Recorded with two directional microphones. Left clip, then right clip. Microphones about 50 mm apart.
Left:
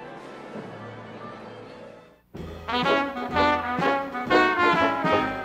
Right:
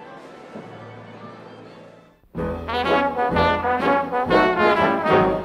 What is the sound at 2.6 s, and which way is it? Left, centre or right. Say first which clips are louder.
Trombone: right 3 dB; left.